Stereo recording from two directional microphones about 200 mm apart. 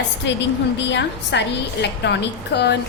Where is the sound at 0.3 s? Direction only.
60° left (ahead or behind).